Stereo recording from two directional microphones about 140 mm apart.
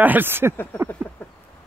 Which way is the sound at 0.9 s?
10° left (ahead or behind).